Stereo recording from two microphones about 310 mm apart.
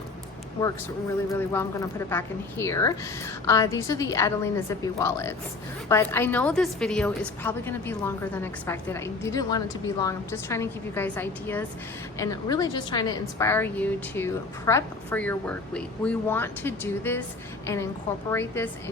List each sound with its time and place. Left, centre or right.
1.3 s a woman's voice: centre
18.3 s a woman's voice: centre